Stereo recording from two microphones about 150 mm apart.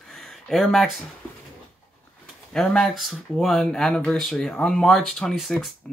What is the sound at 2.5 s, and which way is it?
Speech, 5° left (ahead or behind).